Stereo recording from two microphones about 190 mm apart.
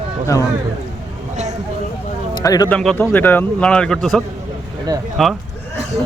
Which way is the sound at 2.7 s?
5° left (ahead or behind).